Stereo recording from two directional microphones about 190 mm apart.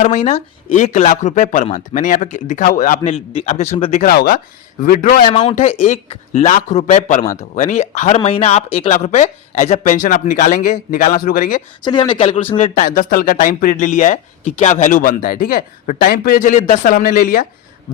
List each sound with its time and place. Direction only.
0.0 s speech: 35° left (ahead or behind)
4.0 s speech: 50° left (ahead or behind)
5.3 s speech: 30° left (ahead or behind)
5.5 s speech: 40° left (ahead or behind)
11.8 s speech: 25° left (ahead or behind)
12.9 s speech: 50° left (ahead or behind)